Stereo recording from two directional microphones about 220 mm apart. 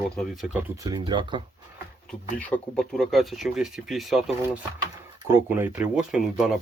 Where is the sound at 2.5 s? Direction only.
Centre (ahead or behind).